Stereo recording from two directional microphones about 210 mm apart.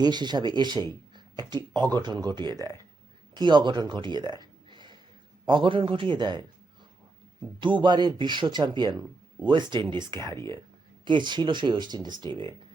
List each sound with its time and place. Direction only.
0.0 s speech: 20° right (ahead or behind)
1.1 s a sound: 20° right (ahead or behind)
1.9 s speech: 20° right (ahead or behind)
4.4 s a sound: 20° right (ahead or behind)
5.5 s speech: 25° right (ahead or behind)
7.6 s speech: 20° right (ahead or behind)